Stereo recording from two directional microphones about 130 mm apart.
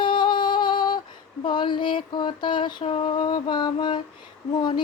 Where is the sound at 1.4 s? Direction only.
35° left (ahead or behind).